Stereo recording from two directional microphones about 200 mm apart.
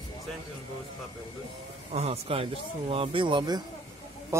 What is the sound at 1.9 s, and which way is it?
A man's voice, 30° right (ahead or behind).